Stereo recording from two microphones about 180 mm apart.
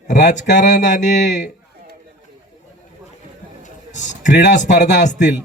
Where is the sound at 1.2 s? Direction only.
75° left (ahead or behind).